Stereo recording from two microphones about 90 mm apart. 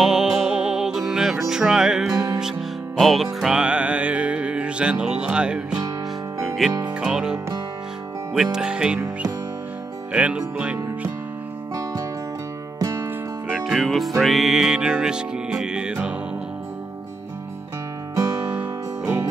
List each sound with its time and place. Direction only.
0.0 s music: 5° right (ahead or behind)
6.9 s music: 10° right (ahead or behind)
11.7 s music: 40° right (ahead or behind)
13.5 s music: centre (ahead or behind)
18.1 s music: 35° right (ahead or behind)
18.5 s music: 20° right (ahead or behind)